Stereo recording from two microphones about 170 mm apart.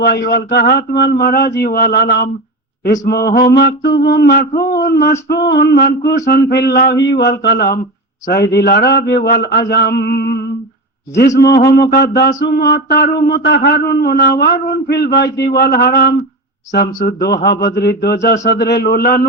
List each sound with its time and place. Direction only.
0.0 s speech: 75° left (ahead or behind)
3.5 s speech: 85° left; by 5.1 s 65° left (ahead or behind)
5.3 s speech: 80° left
12.4 s speech: 80° left
15.5 s speech: 65° left (ahead or behind)
18.4 s speech: 80° left; by 19.3 s 60° left (ahead or behind)